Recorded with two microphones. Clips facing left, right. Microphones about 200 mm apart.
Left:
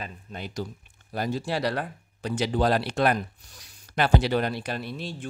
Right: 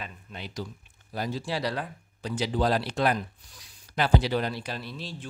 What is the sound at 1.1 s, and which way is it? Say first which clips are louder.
Speech: left 3 dB; 55° left (ahead or behind).